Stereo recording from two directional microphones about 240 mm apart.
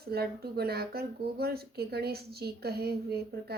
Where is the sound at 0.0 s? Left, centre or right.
Right.